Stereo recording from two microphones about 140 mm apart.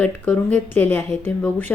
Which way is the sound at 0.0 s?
15° left (ahead or behind).